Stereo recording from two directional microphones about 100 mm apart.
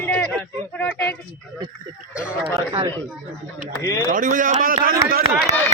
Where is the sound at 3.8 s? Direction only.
35° left (ahead or behind).